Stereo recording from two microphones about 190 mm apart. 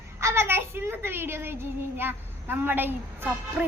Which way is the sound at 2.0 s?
10° right (ahead or behind).